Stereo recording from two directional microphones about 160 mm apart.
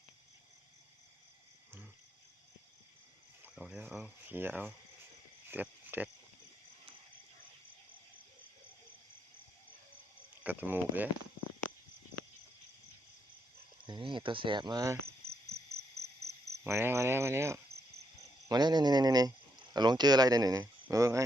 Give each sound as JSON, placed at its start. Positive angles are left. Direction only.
{"t": 3.5, "sound": "speech", "side_deg": -5}
{"t": 5.5, "sound": "a sound", "side_deg": -10}
{"t": 10.4, "sound": "speech", "side_deg": -10}
{"t": 13.8, "sound": "speech", "side_deg": -30}
{"t": 16.5, "sound": "speech", "side_deg": -15}